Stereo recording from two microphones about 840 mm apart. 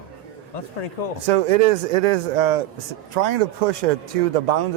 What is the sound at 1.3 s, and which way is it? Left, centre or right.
A man's voice, right.